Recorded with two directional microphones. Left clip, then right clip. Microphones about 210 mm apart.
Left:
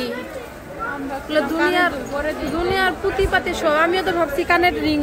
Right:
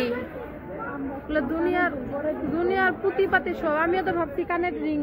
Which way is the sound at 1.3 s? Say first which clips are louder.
Left 7 dB; 15° left (ahead or behind).